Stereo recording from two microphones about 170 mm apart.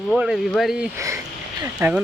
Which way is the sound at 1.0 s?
20° right (ahead or behind).